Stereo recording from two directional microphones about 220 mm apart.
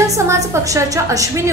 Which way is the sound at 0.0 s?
15° right (ahead or behind).